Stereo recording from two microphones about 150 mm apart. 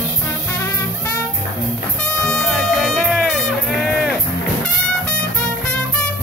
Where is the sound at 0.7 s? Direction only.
15° left (ahead or behind).